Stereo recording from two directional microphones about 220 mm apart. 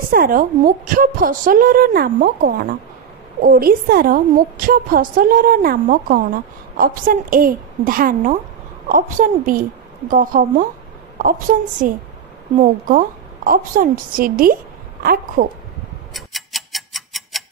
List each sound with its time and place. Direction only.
0.1 s a woman's voice: 40° right (ahead or behind)
16.1 s tick-tock: centre (ahead or behind)